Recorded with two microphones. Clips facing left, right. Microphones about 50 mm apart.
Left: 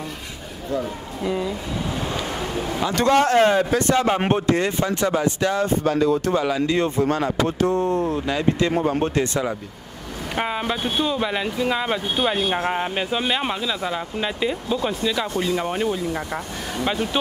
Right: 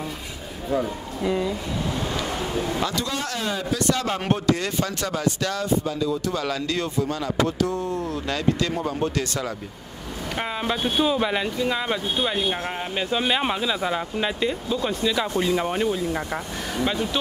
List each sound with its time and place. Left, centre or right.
1.2 s speech: centre
2.1 s a sound: left
2.5 s a sound: centre
2.9 s speech: left
5.7 s speech: left
6.3 s speech: centre
7.0 s speech: left
8.3 s speech: left; by 10.9 s centre
11.0 s speech: centre
11.4 s speech: centre
13.1 s speech: centre
14.4 s speech: centre
16.8 s speech: centre